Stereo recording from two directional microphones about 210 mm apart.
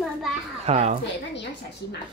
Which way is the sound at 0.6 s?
30° right (ahead or behind).